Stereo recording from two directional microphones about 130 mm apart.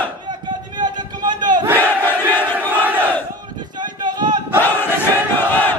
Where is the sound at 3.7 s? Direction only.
35° right (ahead or behind).